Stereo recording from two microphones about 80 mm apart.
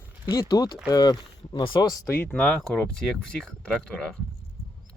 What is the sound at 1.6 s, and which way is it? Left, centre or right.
Speech, left.